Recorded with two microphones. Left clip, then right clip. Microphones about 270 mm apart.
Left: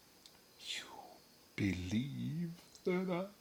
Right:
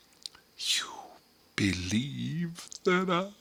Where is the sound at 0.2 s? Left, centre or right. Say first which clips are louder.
Right 17 dB; right.